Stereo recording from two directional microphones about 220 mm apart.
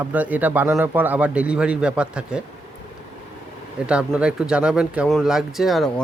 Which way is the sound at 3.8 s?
5° right (ahead or behind).